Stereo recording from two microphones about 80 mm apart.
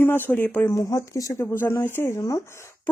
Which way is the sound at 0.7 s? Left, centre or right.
Left.